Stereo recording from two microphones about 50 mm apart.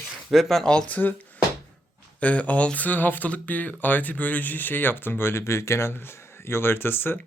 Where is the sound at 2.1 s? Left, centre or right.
Left.